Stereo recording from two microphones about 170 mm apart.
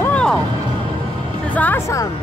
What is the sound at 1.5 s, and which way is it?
Speech, 10° left (ahead or behind).